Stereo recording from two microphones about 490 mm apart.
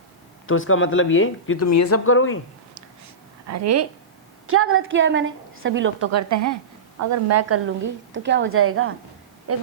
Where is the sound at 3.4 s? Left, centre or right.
Right.